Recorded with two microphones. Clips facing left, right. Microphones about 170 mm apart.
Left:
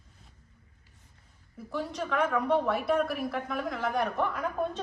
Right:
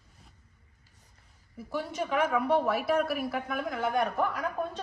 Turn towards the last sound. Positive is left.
turn(degrees=0)  # may be behind; listen again after turning